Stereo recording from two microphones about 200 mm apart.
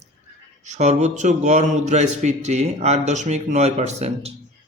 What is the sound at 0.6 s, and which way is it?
Speech, 35° right (ahead or behind).